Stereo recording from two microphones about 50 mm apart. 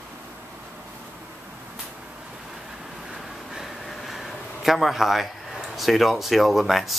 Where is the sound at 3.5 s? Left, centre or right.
Centre.